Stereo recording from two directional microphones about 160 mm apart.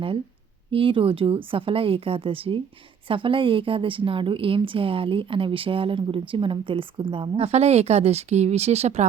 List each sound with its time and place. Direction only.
0.7 s a woman's voice: 35° right (ahead or behind)